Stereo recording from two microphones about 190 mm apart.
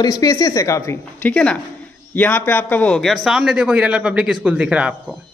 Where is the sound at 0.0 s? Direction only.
20° left (ahead or behind).